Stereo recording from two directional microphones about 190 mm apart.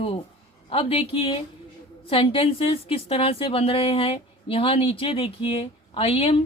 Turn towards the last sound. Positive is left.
turn(degrees=30)  # may be behind; listen again after turning